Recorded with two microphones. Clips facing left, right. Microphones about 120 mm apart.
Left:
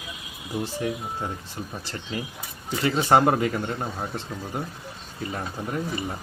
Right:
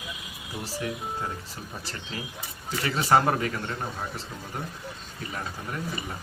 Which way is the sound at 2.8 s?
25° left (ahead or behind).